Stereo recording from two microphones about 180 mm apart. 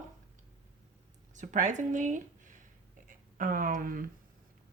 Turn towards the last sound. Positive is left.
turn(degrees=-50)  # may be behind; listen again after turning